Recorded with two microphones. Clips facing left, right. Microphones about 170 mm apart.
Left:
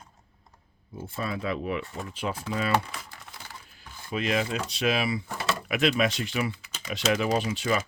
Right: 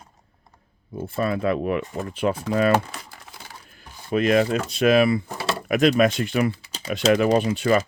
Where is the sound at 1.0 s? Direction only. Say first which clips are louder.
Right 8 dB; 60° right (ahead or behind).